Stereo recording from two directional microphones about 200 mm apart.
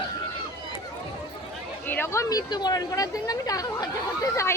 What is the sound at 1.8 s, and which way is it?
Speech, 10° left (ahead or behind).